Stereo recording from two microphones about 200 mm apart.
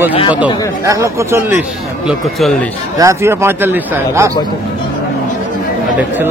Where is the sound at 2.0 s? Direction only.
Centre (ahead or behind).